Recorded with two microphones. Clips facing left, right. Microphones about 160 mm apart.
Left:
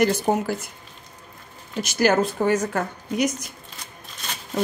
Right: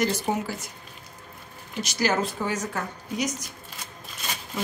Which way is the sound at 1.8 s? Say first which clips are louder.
Left 6 dB; 55° left (ahead or behind).